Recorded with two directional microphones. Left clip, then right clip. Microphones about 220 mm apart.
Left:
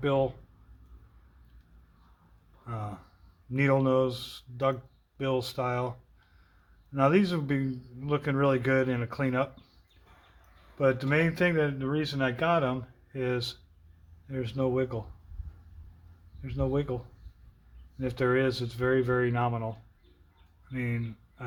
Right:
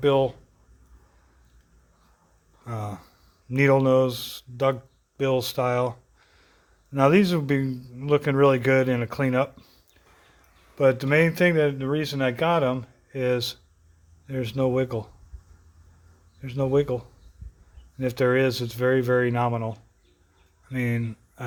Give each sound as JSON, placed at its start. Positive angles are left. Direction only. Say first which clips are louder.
{"t": 0.0, "sound": "speech", "louder": "right 6 dB", "side_deg": -40}
{"t": 2.6, "sound": "a man's voice", "louder": "right 5 dB", "side_deg": -40}
{"t": 10.8, "sound": "speech", "louder": "right 6 dB", "side_deg": -40}
{"t": 16.4, "sound": "speech", "louder": "right 8 dB", "side_deg": -40}